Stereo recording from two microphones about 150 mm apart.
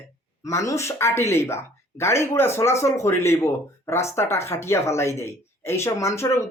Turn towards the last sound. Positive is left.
turn(degrees=20)  # may be behind; listen again after turning